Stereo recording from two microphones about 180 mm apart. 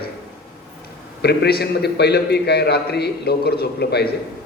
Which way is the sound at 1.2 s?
65° left (ahead or behind).